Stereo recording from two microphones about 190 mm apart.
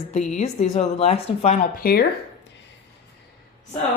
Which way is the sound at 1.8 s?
55° left (ahead or behind).